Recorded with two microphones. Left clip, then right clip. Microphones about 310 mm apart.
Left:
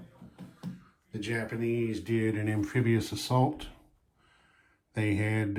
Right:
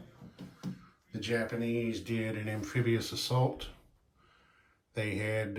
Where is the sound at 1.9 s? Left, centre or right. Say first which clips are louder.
Left 5 dB; centre.